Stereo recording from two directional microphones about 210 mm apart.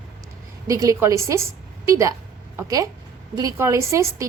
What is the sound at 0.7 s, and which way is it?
A woman's voice, 15° right (ahead or behind).